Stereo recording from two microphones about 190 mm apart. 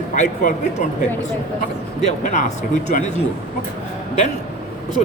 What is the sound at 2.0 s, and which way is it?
A man's voice, 40° left (ahead or behind).